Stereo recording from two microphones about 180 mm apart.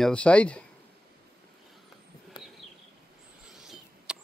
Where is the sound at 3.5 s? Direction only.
5° right (ahead or behind).